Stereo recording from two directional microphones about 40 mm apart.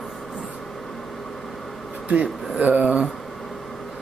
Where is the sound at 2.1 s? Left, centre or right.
Right.